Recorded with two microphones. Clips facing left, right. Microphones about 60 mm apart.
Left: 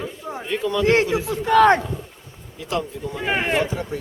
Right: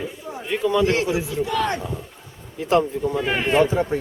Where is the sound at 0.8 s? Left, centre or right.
Left.